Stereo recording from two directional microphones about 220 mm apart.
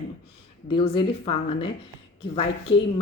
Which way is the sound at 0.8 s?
25° left (ahead or behind).